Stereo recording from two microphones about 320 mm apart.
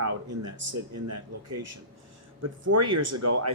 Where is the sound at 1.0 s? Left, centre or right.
Right.